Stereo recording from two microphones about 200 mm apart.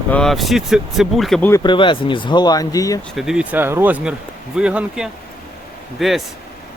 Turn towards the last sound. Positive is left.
turn(degrees=0)  # may be behind; listen again after turning